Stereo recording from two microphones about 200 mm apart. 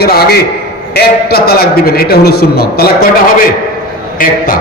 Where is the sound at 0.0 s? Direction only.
50° left (ahead or behind).